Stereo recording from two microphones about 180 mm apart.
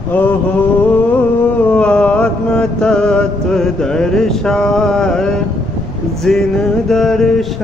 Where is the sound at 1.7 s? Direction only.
5° left (ahead or behind).